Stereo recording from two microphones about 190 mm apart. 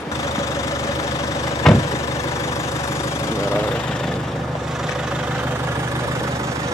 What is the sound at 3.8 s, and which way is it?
Vehicle, 5° left (ahead or behind).